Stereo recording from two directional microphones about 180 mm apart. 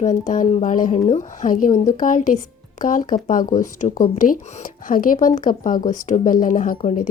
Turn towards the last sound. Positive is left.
turn(degrees=45)  # may be behind; listen again after turning